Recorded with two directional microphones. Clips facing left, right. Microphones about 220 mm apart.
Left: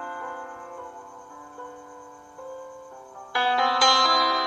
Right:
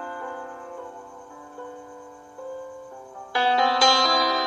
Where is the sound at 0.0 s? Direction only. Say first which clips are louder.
Right 2 dB; 25° right (ahead or behind).